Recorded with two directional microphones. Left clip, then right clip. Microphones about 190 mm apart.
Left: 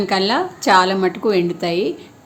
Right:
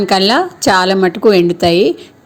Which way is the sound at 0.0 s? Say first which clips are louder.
Right 6 dB; 35° right (ahead or behind).